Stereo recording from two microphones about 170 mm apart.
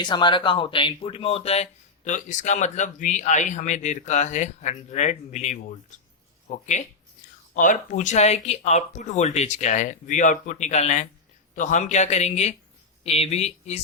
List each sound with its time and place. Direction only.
0.0 s a man's voice: 25° left (ahead or behind)